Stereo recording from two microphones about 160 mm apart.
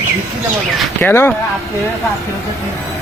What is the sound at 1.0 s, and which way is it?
Speech, 15° left (ahead or behind).